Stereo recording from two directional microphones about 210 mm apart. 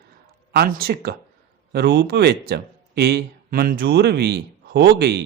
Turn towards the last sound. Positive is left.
turn(degrees=-50)  # may be behind; listen again after turning